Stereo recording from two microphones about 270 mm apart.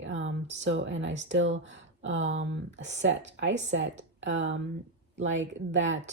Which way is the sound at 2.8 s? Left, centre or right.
Right.